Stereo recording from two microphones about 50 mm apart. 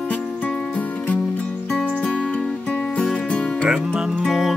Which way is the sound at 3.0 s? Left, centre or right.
Centre.